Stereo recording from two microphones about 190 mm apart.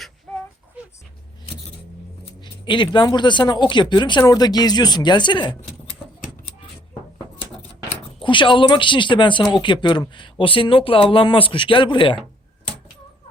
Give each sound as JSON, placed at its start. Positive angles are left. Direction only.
{"t": 0.8, "sound": "a sound", "side_deg": -5}
{"t": 2.4, "sound": "speech", "side_deg": 25}
{"t": 8.2, "sound": "speech", "side_deg": 25}